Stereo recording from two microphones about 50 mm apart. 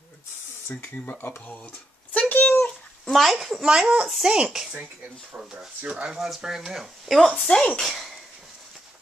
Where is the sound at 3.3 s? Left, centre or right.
Centre.